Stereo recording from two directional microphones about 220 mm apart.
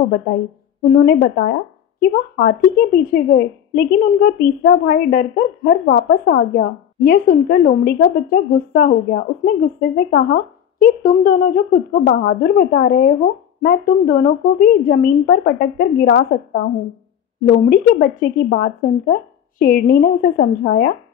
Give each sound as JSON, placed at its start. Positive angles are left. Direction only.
{"t": 0.9, "sound": "a woman's voice", "side_deg": 45}
{"t": 17.6, "sound": "a woman's voice", "side_deg": 40}